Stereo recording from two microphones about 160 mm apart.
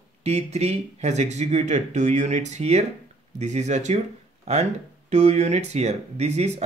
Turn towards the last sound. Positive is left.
turn(degrees=-45)  # may be behind; listen again after turning